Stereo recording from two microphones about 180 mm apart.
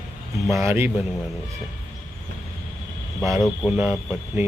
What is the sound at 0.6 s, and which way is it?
Speech, 10° right (ahead or behind).